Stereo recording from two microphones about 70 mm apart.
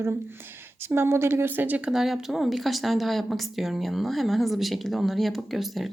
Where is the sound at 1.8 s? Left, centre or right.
Centre.